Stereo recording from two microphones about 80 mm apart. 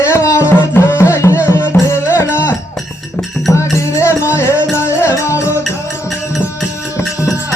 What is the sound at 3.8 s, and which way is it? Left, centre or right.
Music, left.